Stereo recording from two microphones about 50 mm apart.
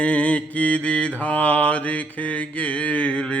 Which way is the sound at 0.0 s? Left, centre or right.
Left.